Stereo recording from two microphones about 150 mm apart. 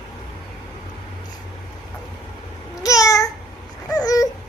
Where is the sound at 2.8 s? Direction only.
20° left (ahead or behind).